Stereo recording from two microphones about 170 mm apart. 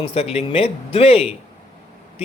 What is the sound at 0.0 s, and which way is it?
Speech, 35° left (ahead or behind).